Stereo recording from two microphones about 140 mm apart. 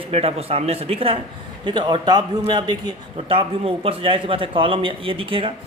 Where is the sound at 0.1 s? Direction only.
45° right (ahead or behind).